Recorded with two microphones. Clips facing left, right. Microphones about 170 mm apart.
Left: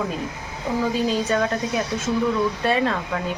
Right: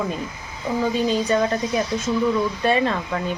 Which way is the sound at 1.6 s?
70° left (ahead or behind).